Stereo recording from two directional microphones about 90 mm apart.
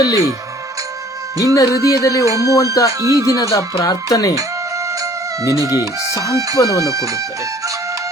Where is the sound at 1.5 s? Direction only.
40° left (ahead or behind).